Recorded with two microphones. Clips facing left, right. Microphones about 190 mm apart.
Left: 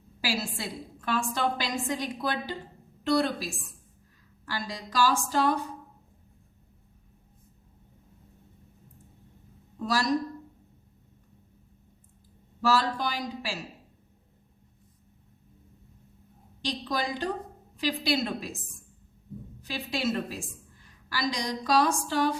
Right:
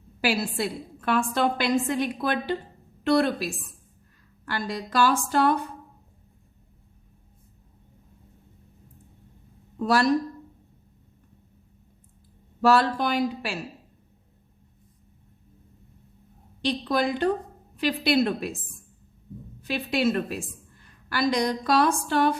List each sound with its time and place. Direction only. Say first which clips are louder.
0.2 s a woman's voice: right 6 dB; 60° right (ahead or behind)
9.8 s a woman's voice: right 6 dB; 60° right (ahead or behind)
12.6 s a woman's voice: right 5 dB; 60° right (ahead or behind)
16.6 s a woman's voice: right 6 dB; 60° right (ahead or behind)
19.6 s a woman's voice: right 6 dB; 60° right (ahead or behind)